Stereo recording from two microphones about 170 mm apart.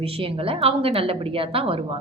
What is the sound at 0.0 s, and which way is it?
A woman's voice, 35° right (ahead or behind).